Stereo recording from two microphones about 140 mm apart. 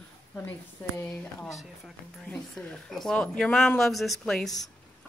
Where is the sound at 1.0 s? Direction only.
15° left (ahead or behind).